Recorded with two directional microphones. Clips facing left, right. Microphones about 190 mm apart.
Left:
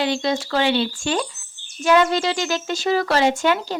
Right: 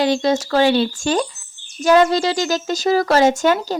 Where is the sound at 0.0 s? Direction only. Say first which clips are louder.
Right 5 dB; 40° right (ahead or behind).